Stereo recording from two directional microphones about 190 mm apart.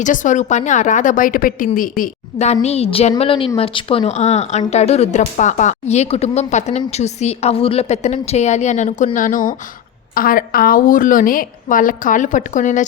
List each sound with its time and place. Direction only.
0.0 s a woman's voice: 40° left (ahead or behind)